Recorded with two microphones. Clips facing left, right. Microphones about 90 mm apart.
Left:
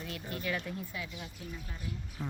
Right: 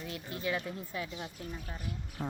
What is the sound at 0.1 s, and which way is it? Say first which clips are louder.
A woman's voice: right 1 dB; 25° right (ahead or behind).